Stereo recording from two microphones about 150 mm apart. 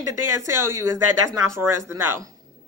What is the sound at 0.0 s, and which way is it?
A woman's voice, 20° right (ahead or behind).